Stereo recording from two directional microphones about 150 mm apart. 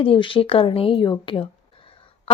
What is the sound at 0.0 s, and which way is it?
Speech, 35° left (ahead or behind).